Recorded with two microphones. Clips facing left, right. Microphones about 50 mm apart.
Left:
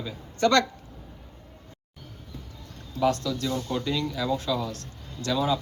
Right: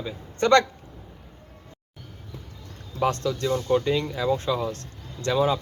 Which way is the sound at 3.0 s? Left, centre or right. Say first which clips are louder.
Right 1 dB; right.